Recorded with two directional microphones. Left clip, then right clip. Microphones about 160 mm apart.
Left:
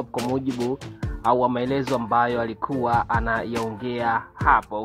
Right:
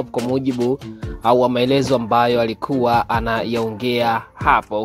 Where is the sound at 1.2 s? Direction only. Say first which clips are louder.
Right 6 dB; 45° right (ahead or behind).